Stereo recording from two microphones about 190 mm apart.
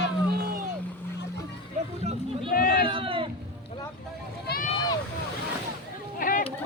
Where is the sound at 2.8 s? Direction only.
30° right (ahead or behind).